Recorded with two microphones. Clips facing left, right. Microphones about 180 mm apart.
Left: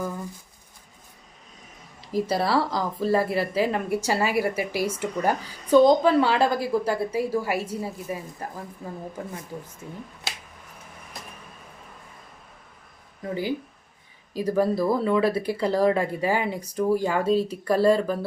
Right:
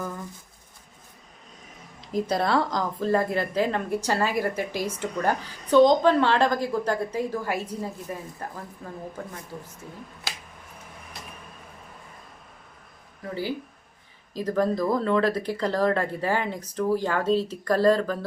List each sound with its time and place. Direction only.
2.0 s a woman's voice: 5° left (ahead or behind)
9.8 s speech: 20° left (ahead or behind)
14.3 s a woman's voice: 10° left (ahead or behind)